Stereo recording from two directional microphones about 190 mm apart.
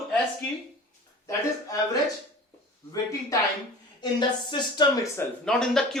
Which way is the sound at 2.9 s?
15° left (ahead or behind).